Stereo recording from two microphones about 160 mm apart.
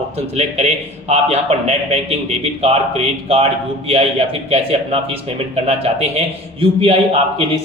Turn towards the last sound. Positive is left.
turn(degrees=-40)  # may be behind; listen again after turning